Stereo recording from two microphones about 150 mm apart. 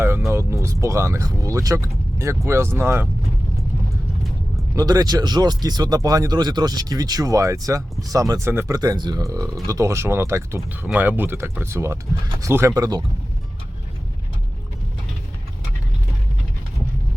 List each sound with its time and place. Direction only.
0.3 s speech: 20° right (ahead or behind)
4.7 s speech: 25° right (ahead or behind)